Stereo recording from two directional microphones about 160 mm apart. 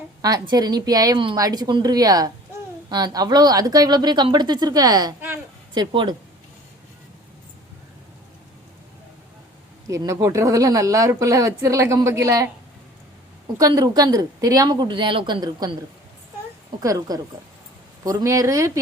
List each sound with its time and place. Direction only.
0.2 s speech: 25° right (ahead or behind)
9.8 s speech: 20° right (ahead or behind)
13.6 s speech: 25° right (ahead or behind)
16.8 s speech: 20° right (ahead or behind)